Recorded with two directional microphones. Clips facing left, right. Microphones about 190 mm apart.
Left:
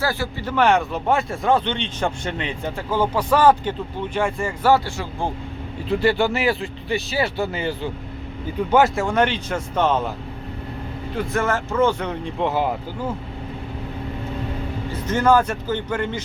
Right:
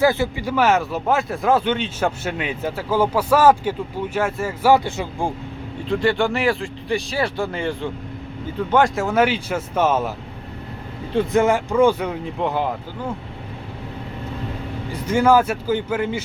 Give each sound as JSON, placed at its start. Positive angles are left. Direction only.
{"t": 0.0, "sound": "speech", "side_deg": -20}
{"t": 4.7, "sound": "speech", "side_deg": -20}
{"t": 5.9, "sound": "speech", "side_deg": 5}
{"t": 11.1, "sound": "speech", "side_deg": -20}
{"t": 15.0, "sound": "speech", "side_deg": -10}